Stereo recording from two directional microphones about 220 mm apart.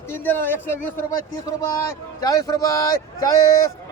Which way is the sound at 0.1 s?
10° left (ahead or behind).